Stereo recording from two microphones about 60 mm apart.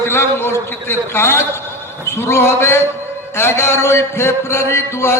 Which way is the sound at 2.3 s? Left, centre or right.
Left.